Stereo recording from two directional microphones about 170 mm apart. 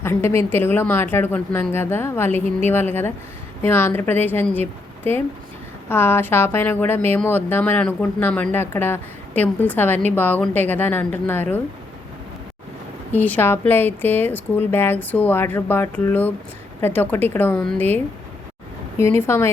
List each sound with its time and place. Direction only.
0.0 s speech: 15° left (ahead or behind)
5.9 s speech: 15° left (ahead or behind)
13.1 s speech: 10° left (ahead or behind)
18.9 s speech: 15° left (ahead or behind)